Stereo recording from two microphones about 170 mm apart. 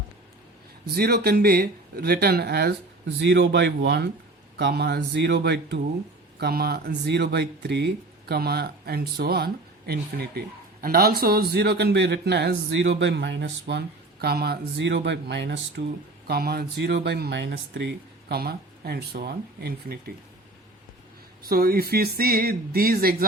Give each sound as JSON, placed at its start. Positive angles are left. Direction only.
{"t": 0.9, "sound": "speech", "side_deg": -65}
{"t": 3.2, "sound": "speech", "side_deg": -90}
{"t": 6.4, "sound": "speech", "side_deg": -65}
{"t": 8.3, "sound": "speech", "side_deg": -70}
{"t": 16.2, "sound": "speech", "side_deg": -65}
{"t": 21.4, "sound": "speech", "side_deg": -60}